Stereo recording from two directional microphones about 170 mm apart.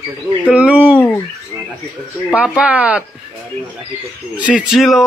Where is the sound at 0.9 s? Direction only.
10° left (ahead or behind).